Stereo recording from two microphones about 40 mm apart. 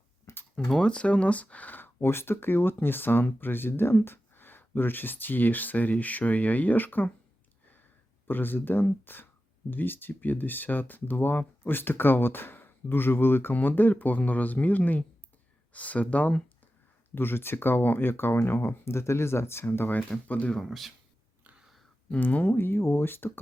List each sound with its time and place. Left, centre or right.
0.8 s speech: left
1.8 s speech: left
8.3 s speech: left
13.5 s speech: left
17.2 s speech: left
20.2 s speech: left
20.6 s speech: centre
22.2 s speech: left
22.5 s speech: left